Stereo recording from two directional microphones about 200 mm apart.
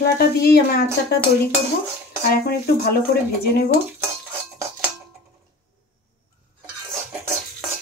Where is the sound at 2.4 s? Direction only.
50° left (ahead or behind).